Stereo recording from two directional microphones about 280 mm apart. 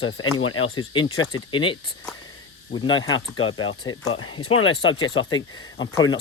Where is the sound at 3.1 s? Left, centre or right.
Left.